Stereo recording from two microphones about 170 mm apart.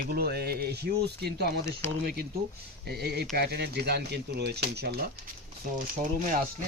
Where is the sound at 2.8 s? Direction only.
70° right (ahead or behind).